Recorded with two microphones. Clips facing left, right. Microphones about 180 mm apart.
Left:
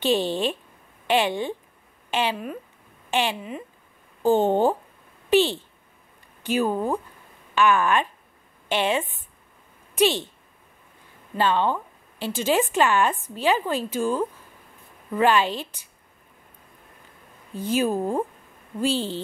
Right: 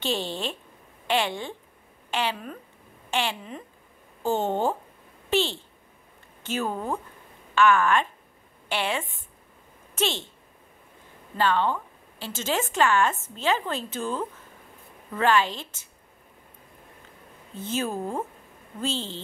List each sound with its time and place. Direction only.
0.0 s a woman's voice: 15° left (ahead or behind)
11.3 s a sound: 15° left (ahead or behind)
12.4 s speech: 15° left (ahead or behind)
17.6 s speech: 10° left (ahead or behind)